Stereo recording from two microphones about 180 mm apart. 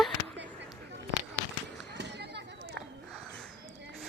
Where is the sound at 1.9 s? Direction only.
70° right (ahead or behind).